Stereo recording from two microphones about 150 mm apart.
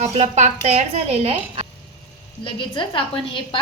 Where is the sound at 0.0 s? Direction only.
50° right (ahead or behind).